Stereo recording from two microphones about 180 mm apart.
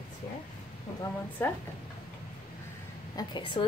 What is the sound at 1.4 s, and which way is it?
Speech, 10° left (ahead or behind).